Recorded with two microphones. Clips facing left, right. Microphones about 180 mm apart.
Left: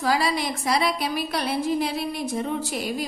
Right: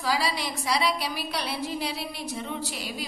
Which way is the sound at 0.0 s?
50° left (ahead or behind).